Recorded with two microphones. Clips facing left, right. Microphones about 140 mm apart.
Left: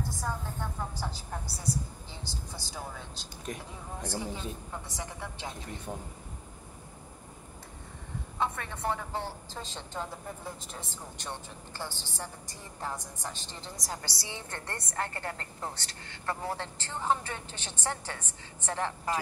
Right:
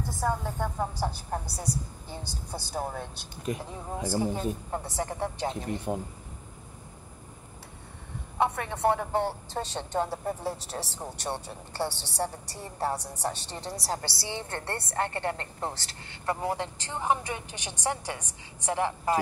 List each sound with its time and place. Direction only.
0.2 s a woman's voice: 55° right (ahead or behind)
3.4 s speech: 5° right (ahead or behind)
4.1 s speech: 45° right (ahead or behind)
8.4 s a woman's voice: 65° right (ahead or behind)
12.7 s a woman's voice: 35° right (ahead or behind)
16.1 s a woman's voice: 15° right (ahead or behind)